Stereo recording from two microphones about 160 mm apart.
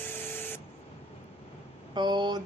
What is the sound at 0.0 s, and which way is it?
Printer, 15° left (ahead or behind).